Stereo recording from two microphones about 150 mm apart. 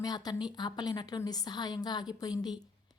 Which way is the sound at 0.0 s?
25° left (ahead or behind).